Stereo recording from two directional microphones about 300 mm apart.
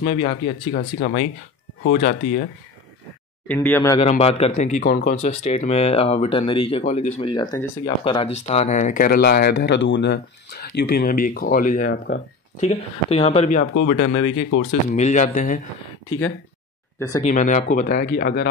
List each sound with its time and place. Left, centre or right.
0.0 s speech: centre
3.4 s speech: centre; by 15.6 s left
17.2 s speech: left